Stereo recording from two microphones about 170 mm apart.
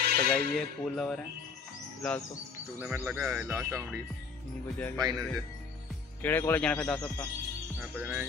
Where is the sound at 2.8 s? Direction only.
10° right (ahead or behind).